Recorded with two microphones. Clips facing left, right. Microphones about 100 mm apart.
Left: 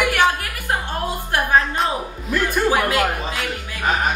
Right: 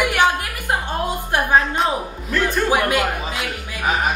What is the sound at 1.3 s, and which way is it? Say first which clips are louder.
Speech: right 1 dB; 20° right (ahead or behind).